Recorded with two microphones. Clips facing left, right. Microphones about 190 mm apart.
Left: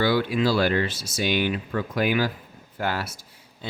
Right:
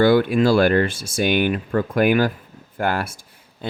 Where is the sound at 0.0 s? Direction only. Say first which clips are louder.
Right 7 dB; 50° right (ahead or behind).